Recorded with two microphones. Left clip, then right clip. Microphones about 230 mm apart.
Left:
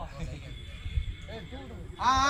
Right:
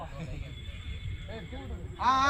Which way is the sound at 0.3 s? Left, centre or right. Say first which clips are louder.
Even; left.